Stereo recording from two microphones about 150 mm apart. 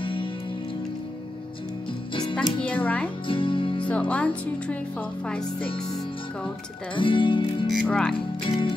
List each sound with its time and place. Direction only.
0.0 s music: 35° left (ahead or behind)
2.6 s speech: 10° left (ahead or behind)
3.3 s music: 35° left (ahead or behind)
4.1 s speech: 10° left (ahead or behind)
7.0 s speech: 35° left (ahead or behind)
7.8 s speech: 5° left (ahead or behind)
8.5 s speech: 35° left (ahead or behind)